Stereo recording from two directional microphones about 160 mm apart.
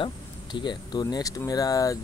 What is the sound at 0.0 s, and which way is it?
Speech, 30° left (ahead or behind).